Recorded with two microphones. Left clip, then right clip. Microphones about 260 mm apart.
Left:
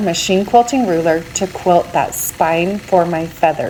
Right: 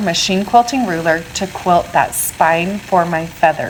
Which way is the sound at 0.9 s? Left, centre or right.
Right.